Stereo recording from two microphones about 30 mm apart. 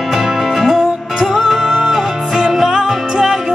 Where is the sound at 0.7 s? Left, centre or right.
Centre.